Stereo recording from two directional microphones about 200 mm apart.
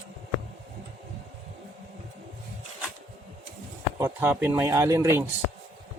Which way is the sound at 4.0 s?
10° right (ahead or behind).